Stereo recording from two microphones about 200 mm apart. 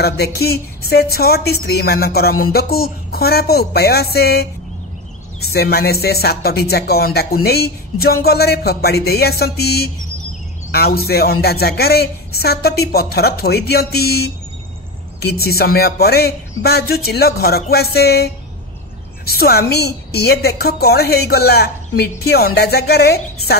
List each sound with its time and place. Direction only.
0.0 s speech: 50° left (ahead or behind)